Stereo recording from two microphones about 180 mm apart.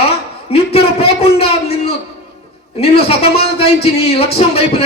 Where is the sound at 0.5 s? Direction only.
35° left (ahead or behind).